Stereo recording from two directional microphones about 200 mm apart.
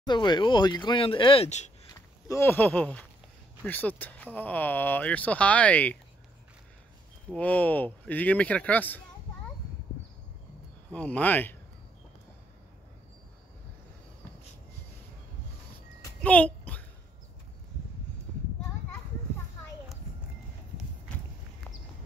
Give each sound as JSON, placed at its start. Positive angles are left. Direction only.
{"t": 0.0, "sound": "speech", "side_deg": 20}
{"t": 2.0, "sound": "speech", "side_deg": 15}
{"t": 7.2, "sound": "speech", "side_deg": 5}
{"t": 10.9, "sound": "speech", "side_deg": 5}
{"t": 16.2, "sound": "a sound", "side_deg": 5}